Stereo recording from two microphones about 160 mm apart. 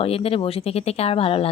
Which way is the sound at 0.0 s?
35° left (ahead or behind).